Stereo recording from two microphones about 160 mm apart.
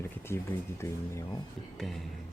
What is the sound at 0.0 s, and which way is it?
Speech, 15° left (ahead or behind).